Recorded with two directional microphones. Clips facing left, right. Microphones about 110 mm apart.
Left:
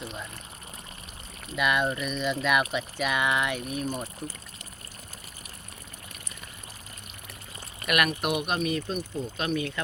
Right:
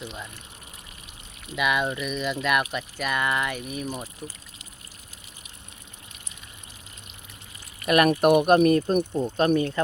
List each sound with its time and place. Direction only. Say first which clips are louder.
1.5 s speech: right 1 dB; centre (ahead or behind)
7.9 s speech: right 7 dB; 30° right (ahead or behind)
8.2 s speech: right 11 dB; 45° right (ahead or behind)
9.6 s speech: right 7 dB; 40° right (ahead or behind)